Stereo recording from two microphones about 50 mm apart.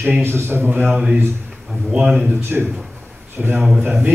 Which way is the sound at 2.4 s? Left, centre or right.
Right.